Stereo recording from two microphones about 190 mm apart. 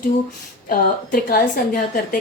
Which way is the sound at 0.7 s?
50° left (ahead or behind).